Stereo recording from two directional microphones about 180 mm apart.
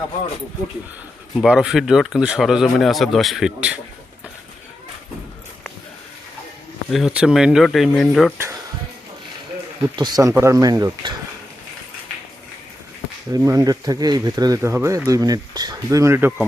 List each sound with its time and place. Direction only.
1.4 s speech: 5° right (ahead or behind)
6.9 s speech: 5° right (ahead or behind)
9.9 s speech: 25° right (ahead or behind)
13.3 s speech: 15° right (ahead or behind)